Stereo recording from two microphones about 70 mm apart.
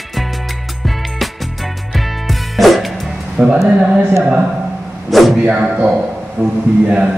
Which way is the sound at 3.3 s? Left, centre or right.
Centre.